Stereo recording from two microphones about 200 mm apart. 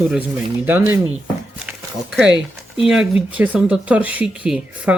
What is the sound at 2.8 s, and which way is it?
Speech, 5° right (ahead or behind).